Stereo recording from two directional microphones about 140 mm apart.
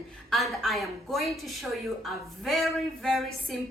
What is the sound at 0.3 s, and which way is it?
Speech, centre (ahead or behind).